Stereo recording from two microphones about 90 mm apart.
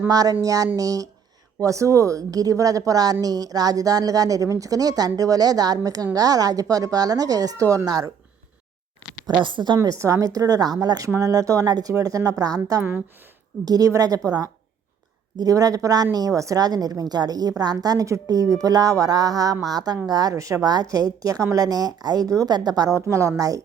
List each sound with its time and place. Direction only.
0.1 s a woman's voice: 45° right (ahead or behind)
9.4 s a woman's voice: 60° right (ahead or behind)
9.7 s a woman's voice: 40° right (ahead or behind)
15.4 s a woman's voice: 45° right (ahead or behind)